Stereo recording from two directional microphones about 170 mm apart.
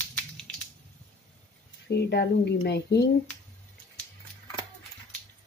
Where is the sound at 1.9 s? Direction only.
75° left (ahead or behind).